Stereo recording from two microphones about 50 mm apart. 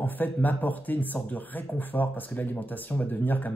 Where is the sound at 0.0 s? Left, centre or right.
Left.